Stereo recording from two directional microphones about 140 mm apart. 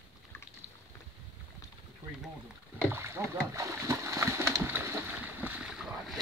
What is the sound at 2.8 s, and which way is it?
Splash, 20° right (ahead or behind).